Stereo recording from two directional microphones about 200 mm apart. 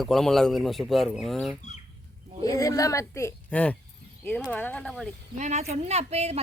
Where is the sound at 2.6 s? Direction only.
15° left (ahead or behind).